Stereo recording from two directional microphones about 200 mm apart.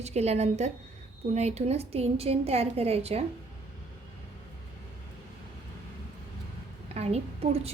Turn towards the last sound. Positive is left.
turn(degrees=-30)  # may be behind; listen again after turning